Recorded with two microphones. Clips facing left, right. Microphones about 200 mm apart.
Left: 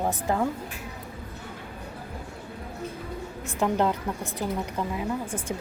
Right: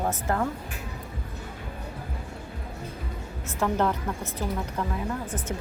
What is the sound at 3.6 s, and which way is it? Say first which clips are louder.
Speech: left 1 dB; 15° left (ahead or behind).